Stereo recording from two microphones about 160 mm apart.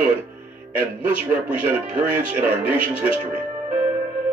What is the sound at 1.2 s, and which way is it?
Speech, 10° right (ahead or behind).